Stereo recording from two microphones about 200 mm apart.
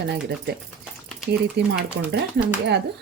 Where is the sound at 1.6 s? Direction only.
55° right (ahead or behind).